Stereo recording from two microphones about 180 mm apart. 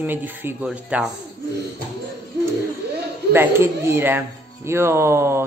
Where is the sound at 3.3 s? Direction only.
15° right (ahead or behind).